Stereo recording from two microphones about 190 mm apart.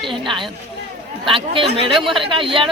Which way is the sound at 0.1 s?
25° right (ahead or behind).